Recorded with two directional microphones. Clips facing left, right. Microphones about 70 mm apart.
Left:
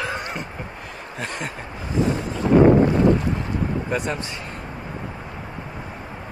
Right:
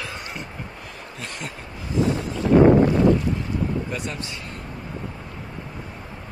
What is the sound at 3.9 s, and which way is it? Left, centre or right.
Speech, left.